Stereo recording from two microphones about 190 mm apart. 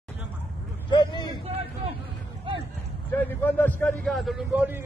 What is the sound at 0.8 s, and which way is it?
Vehicle, 25° left (ahead or behind).